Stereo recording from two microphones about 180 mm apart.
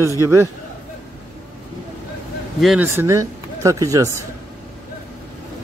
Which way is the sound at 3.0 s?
15° right (ahead or behind).